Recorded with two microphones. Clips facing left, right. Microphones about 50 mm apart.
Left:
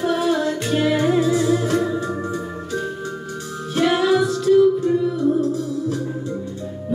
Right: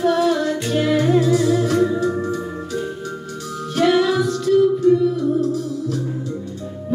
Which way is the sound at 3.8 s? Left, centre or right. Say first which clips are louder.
Right 1 dB; centre.